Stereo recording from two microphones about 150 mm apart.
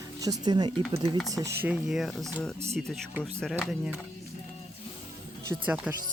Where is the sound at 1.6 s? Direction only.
5° right (ahead or behind).